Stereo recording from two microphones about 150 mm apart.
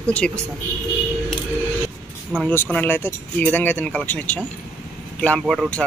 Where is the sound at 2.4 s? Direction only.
10° left (ahead or behind).